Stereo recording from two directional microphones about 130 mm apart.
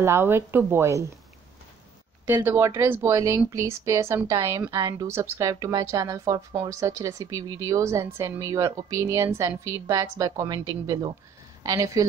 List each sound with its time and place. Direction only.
0.0 s speech: 20° right (ahead or behind)
2.2 s speech: 15° right (ahead or behind)